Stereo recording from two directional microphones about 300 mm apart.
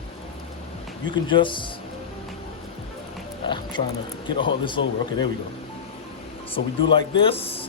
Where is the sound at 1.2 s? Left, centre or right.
Centre.